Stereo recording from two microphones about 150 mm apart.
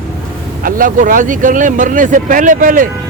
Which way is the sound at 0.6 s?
65° right (ahead or behind).